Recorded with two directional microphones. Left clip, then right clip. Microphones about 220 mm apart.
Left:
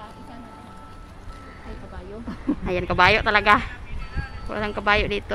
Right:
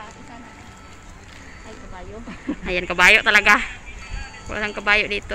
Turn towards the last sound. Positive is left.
turn(degrees=15)  # may be behind; listen again after turning